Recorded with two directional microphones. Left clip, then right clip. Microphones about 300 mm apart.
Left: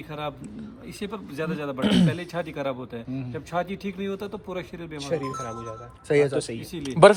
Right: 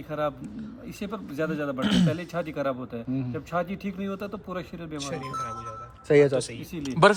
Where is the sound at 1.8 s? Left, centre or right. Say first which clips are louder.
Left 4 dB; centre.